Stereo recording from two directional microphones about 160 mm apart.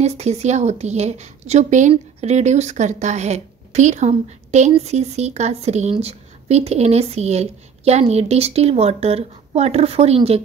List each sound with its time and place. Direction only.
0.0 s a woman's voice: 45° right (ahead or behind)